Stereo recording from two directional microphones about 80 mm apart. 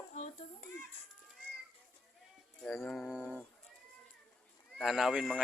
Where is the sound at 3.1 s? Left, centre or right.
Centre.